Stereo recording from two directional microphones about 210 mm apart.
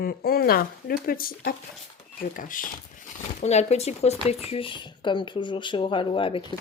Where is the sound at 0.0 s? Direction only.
45° left (ahead or behind).